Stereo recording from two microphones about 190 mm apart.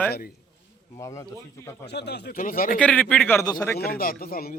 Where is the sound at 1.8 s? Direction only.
60° left (ahead or behind).